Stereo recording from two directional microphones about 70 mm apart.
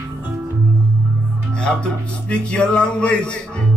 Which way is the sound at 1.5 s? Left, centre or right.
Centre.